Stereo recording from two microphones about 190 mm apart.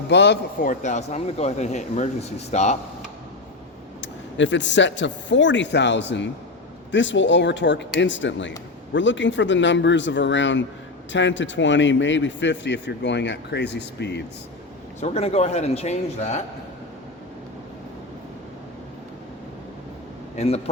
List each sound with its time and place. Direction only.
0.1 s a man's voice: 65° left (ahead or behind)
0.6 s speech: 40° left (ahead or behind)
4.0 s a man's voice: 70° left (ahead or behind)
15.0 s speech: 35° left (ahead or behind)
20.3 s a man's voice: 35° left (ahead or behind)